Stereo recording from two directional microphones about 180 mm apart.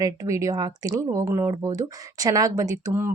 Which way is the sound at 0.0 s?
15° right (ahead or behind).